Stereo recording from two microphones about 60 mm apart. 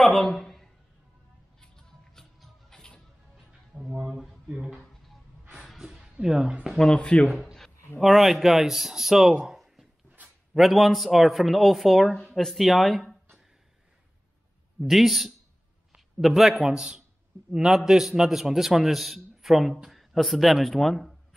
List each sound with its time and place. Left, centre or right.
0.0 s a sound: centre
1.6 s music: centre
3.7 s speech: centre
5.6 s a sound: centre
6.2 s a man's voice: centre
6.8 s speech: centre
8.0 s speech: centre
10.2 s a sound: right
10.5 s speech: centre
14.8 s a man's voice: centre